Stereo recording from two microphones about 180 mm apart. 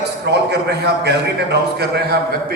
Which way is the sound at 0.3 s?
75° right (ahead or behind).